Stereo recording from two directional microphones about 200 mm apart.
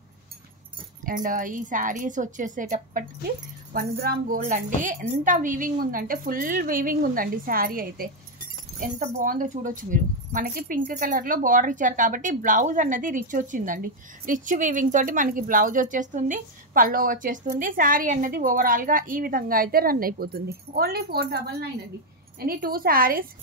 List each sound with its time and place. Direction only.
1.0 s a woman's voice: 45° right (ahead or behind)
4.4 s speech: 40° right (ahead or behind)